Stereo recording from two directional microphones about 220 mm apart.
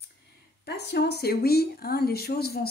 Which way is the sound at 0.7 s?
50° left (ahead or behind).